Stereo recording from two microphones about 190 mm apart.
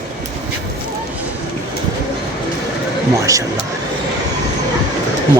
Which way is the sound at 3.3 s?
15° right (ahead or behind).